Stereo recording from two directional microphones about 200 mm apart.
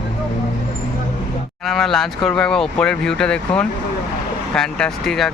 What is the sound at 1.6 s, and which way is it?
Speech, centre (ahead or behind).